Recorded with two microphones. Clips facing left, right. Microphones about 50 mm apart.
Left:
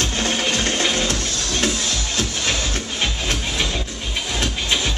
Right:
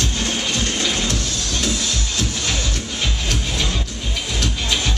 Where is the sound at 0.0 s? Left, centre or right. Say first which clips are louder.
Left 2 dB; left.